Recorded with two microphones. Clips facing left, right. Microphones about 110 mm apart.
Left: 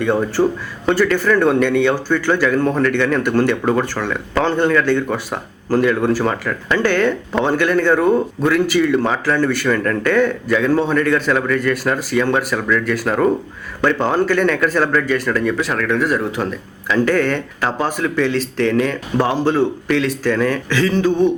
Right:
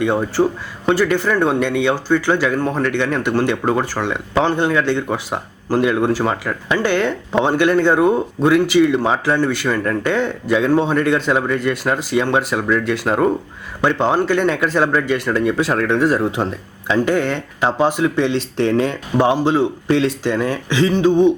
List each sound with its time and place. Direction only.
0.0 s speech: 15° right (ahead or behind)
19.2 s speech: 20° right (ahead or behind)